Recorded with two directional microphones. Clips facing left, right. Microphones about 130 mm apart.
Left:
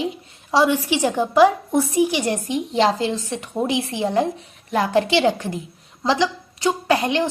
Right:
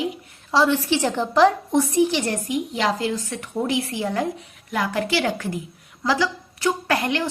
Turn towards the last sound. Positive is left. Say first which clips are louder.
# left 3 dB
turn(degrees=20)  # may be behind; listen again after turning